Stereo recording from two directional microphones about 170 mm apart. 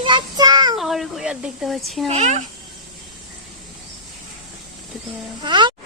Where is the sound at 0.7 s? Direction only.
Centre (ahead or behind).